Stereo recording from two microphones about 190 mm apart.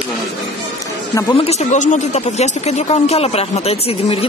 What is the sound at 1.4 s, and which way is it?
Speech, 35° left (ahead or behind).